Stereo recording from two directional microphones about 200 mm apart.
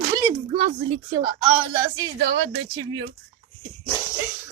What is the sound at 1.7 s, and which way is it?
Speech, 20° right (ahead or behind).